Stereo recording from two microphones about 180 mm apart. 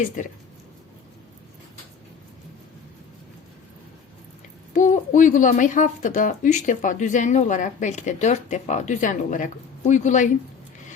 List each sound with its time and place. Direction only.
0.2 s speech: 45° left (ahead or behind)
4.7 s speech: 45° left (ahead or behind)